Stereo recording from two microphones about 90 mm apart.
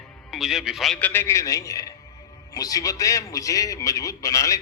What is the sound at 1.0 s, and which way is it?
Speech, 20° left (ahead or behind).